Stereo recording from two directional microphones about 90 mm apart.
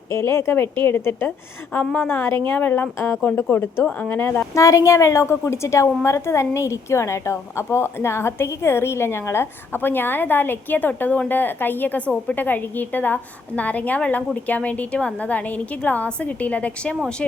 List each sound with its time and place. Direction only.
0.1 s a woman's voice: 30° left (ahead or behind)
1.7 s a woman's voice: 15° left (ahead or behind)
4.5 s a woman's voice: 35° left (ahead or behind); by 17.0 s 15° left (ahead or behind)